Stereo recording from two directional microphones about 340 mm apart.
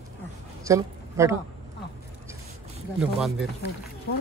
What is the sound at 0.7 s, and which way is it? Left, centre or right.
Speech, centre.